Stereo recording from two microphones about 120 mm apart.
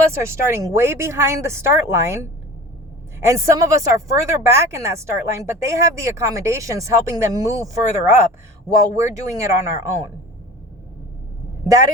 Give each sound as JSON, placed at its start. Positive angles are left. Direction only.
{"t": 0.4, "sound": "speech", "side_deg": -20}